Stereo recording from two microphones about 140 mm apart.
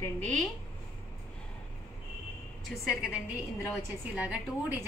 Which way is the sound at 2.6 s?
Centre (ahead or behind).